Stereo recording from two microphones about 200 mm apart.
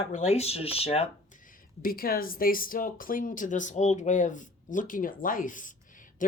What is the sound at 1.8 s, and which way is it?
Speech, 45° left (ahead or behind).